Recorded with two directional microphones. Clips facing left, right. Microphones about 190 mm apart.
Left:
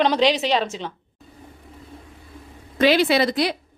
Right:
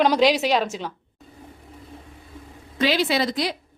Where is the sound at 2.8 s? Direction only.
60° left (ahead or behind).